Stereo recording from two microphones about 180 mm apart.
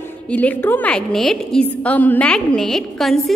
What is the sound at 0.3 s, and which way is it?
A woman's voice, 10° left (ahead or behind).